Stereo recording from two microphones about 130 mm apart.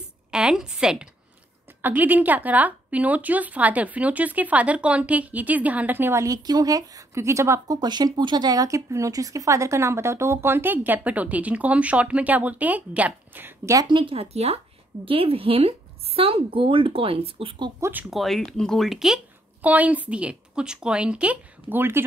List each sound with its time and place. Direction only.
0.3 s a woman's voice: 5° right (ahead or behind)
13.7 s speech: 40° right (ahead or behind)
17.7 s speech: 20° right (ahead or behind)
18.1 s a woman's voice: centre (ahead or behind); by 22.0 s 15° right (ahead or behind)